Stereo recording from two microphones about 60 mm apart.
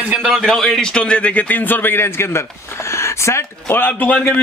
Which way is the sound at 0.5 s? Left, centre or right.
Centre.